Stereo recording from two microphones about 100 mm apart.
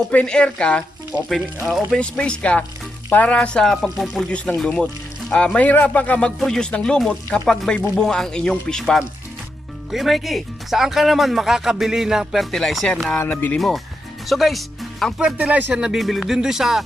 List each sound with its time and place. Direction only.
0.1 s speech: 10° left (ahead or behind)
1.1 s speech: 15° right (ahead or behind)
1.6 s speech: centre (ahead or behind)
2.0 s speech: 10° left (ahead or behind)
13.1 s speech: 15° left (ahead or behind)
13.6 s speech: centre (ahead or behind)
15.2 s speech: 10° right (ahead or behind)